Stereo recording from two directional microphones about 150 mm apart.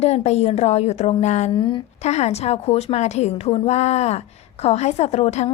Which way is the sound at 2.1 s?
45° left (ahead or behind).